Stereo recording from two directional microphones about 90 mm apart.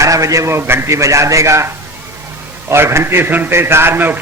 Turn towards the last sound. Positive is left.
turn(degrees=-25)  # may be behind; listen again after turning